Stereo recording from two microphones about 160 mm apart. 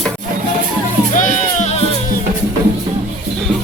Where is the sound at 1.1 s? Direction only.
45° left (ahead or behind).